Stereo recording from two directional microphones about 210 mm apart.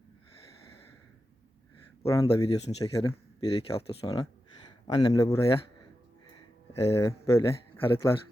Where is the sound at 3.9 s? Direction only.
25° left (ahead or behind).